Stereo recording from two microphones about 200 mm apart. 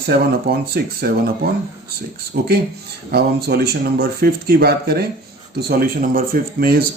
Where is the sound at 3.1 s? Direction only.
50° right (ahead or behind).